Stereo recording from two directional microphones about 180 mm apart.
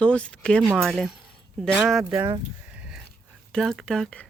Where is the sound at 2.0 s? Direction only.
20° right (ahead or behind).